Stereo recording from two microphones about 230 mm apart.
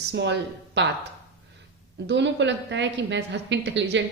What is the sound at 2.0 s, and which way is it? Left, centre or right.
A woman's voice, right.